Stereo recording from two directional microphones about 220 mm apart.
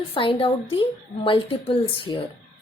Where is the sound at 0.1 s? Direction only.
25° left (ahead or behind).